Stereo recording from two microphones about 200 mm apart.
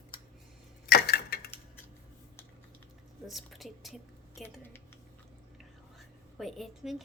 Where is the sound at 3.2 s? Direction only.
Centre (ahead or behind).